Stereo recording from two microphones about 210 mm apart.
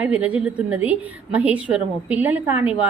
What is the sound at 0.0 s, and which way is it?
A woman's voice, 5° right (ahead or behind).